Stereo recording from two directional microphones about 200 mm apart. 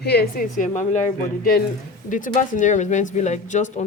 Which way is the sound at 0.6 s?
40° left (ahead or behind).